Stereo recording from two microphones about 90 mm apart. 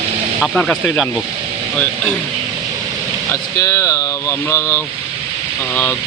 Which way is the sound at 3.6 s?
40° left (ahead or behind).